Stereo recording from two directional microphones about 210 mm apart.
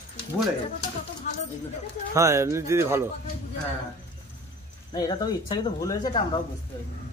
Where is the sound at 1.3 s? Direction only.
35° left (ahead or behind).